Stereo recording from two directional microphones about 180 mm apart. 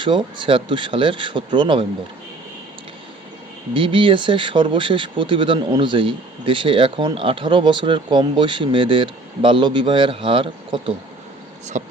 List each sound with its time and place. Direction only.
0.0 s speech: 25° right (ahead or behind)
3.8 s speech: 30° right (ahead or behind)
11.7 s speech: 45° right (ahead or behind)